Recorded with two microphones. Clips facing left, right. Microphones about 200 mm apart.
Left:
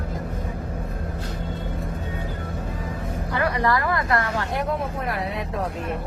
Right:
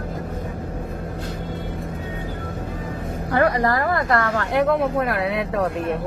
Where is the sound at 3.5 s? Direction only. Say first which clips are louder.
Right 2 dB; 40° right (ahead or behind); by 5.7 s 70° right (ahead or behind).